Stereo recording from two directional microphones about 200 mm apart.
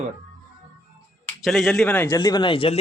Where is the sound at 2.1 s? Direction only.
20° left (ahead or behind).